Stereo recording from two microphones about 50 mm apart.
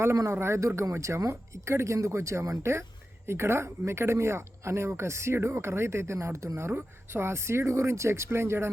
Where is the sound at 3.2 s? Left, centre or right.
Right.